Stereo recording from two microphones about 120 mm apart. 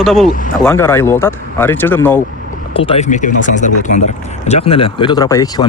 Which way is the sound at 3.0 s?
90° left.